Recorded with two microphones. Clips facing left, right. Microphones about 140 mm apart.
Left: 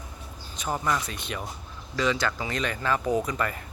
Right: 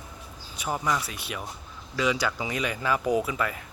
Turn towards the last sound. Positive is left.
turn(degrees=-5)  # may be behind; listen again after turning